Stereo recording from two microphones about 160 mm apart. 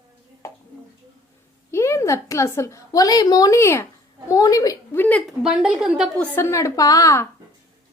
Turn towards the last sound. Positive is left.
turn(degrees=20)  # may be behind; listen again after turning